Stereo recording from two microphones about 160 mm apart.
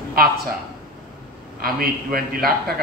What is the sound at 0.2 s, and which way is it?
Speech, 70° right (ahead or behind).